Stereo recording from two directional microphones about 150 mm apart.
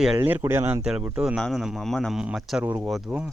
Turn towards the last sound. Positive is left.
turn(degrees=-20)  # may be behind; listen again after turning